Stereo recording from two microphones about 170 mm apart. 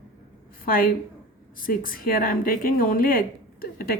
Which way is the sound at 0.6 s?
60° left (ahead or behind).